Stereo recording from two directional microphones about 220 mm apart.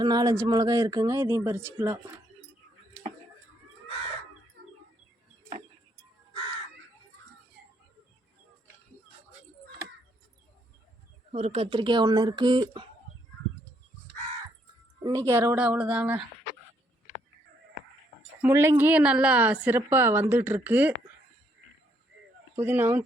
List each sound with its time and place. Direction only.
0.0 s a woman's voice: 20° right (ahead or behind)
11.3 s speech: 25° right (ahead or behind)
15.0 s a woman's voice: 15° right (ahead or behind)
18.4 s a woman's voice: 10° right (ahead or behind)
22.5 s a woman's voice: 10° right (ahead or behind)